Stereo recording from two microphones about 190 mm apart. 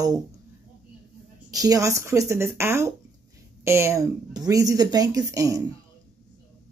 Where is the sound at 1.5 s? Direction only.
20° right (ahead or behind).